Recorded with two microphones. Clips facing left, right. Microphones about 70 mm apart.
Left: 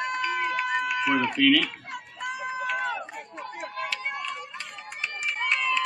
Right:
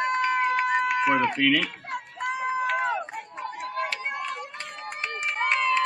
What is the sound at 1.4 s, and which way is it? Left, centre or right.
Speech, right.